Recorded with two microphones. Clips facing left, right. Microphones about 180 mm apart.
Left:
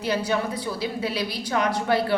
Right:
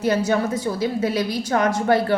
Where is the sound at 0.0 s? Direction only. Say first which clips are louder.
Right 5 dB; 45° right (ahead or behind).